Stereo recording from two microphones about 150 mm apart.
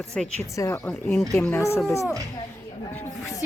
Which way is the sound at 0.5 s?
20° left (ahead or behind).